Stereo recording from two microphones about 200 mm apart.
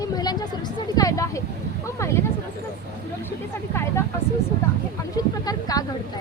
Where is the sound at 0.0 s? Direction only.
20° left (ahead or behind).